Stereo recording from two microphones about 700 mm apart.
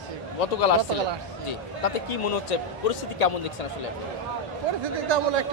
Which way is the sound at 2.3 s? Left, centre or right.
Left.